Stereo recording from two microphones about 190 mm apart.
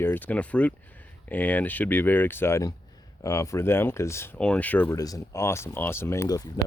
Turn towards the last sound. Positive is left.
turn(degrees=20)  # may be behind; listen again after turning